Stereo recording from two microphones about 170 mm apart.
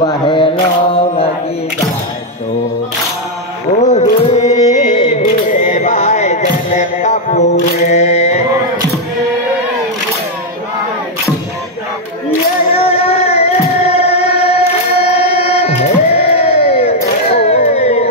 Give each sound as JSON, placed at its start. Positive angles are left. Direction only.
{"t": 0.0, "sound": "mantra", "side_deg": 30}
{"t": 3.8, "sound": "a sound", "side_deg": 45}
{"t": 4.6, "sound": "music", "side_deg": 45}
{"t": 6.4, "sound": "mantra", "side_deg": 45}
{"t": 12.7, "sound": "music", "side_deg": 35}